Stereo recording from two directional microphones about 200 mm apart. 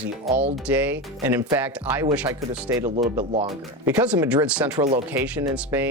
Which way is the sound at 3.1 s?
30° right (ahead or behind).